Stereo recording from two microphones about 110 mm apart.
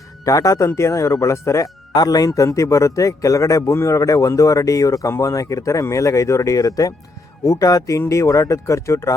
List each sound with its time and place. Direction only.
0.3 s speech: 30° left (ahead or behind)